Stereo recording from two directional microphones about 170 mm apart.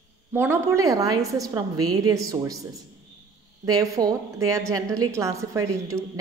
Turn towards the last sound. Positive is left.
turn(degrees=-15)  # may be behind; listen again after turning